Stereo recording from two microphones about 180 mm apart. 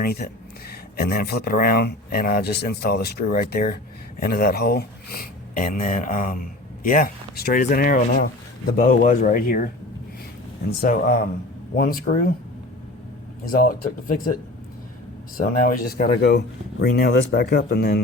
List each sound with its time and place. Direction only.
0.0 s speech: 60° left (ahead or behind)
10.7 s speech: 50° left (ahead or behind)
13.4 s speech: 50° left (ahead or behind)
15.4 s speech: 50° left (ahead or behind)